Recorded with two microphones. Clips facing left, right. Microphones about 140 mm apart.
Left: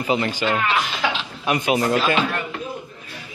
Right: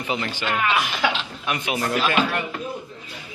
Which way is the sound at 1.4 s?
35° left (ahead or behind).